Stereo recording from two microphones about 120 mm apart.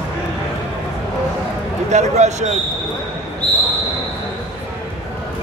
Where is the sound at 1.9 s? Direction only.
75° right (ahead or behind).